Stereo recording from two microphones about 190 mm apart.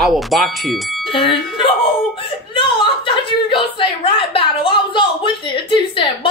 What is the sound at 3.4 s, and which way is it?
A woman's voice, 25° left (ahead or behind).